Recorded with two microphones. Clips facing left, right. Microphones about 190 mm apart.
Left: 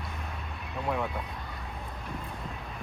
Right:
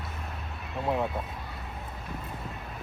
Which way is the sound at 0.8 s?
20° right (ahead or behind).